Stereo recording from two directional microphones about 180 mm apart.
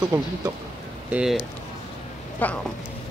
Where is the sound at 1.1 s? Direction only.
5° right (ahead or behind).